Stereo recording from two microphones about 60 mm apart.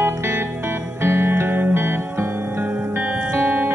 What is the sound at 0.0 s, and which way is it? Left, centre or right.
Music, right.